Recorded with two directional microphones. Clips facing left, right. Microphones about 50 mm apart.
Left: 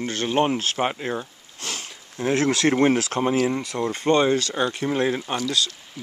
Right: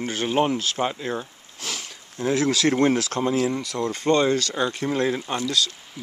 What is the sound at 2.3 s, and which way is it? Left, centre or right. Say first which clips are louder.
Speech: left 1 dB; left.